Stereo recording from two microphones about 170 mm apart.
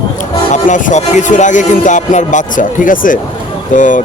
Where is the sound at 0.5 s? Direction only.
45° left (ahead or behind).